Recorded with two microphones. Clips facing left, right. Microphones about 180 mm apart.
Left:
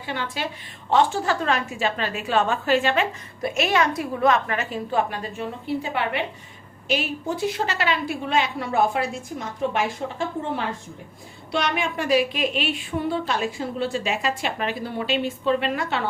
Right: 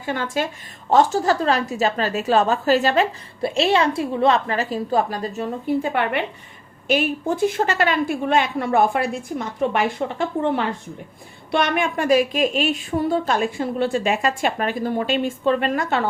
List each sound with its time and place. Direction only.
0.0 s a woman's voice: 45° right (ahead or behind)